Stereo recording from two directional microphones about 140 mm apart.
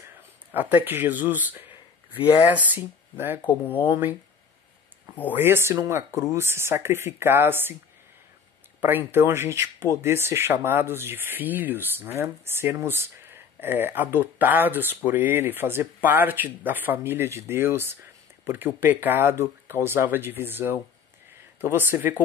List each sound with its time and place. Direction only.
0.0 s speech: 15° right (ahead or behind)
5.3 s speech: 15° right (ahead or behind)
8.8 s speech: 15° right (ahead or behind)